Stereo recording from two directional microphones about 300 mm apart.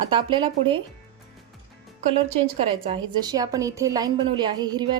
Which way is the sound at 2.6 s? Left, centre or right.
Centre.